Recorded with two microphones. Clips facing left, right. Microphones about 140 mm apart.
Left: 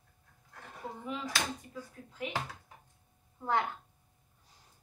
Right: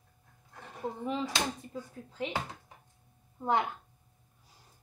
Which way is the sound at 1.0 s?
30° right (ahead or behind).